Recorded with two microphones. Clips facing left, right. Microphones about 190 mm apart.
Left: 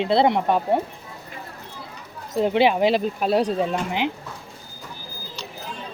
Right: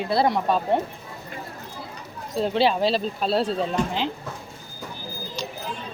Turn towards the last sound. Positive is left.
turn(degrees=15)  # may be behind; listen again after turning